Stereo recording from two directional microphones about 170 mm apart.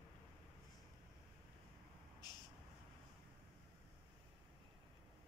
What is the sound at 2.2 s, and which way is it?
Vehicle, 25° left (ahead or behind).